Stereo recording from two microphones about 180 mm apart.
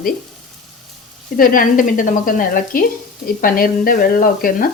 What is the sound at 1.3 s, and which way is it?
Speech, 50° left (ahead or behind).